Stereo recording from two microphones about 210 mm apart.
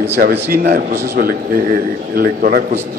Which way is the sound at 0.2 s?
45° right (ahead or behind).